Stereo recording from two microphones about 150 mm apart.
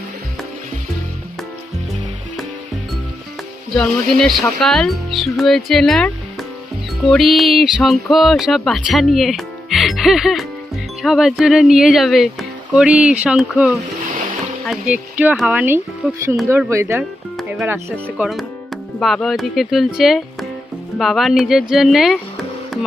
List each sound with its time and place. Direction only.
3.7 s speech: centre (ahead or behind); by 17.0 s 20° right (ahead or behind)
17.0 s music: 5° right (ahead or behind)
18.2 s speech: centre (ahead or behind)
22.7 s music: centre (ahead or behind)